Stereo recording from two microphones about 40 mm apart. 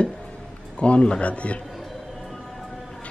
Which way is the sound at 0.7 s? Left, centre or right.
Left.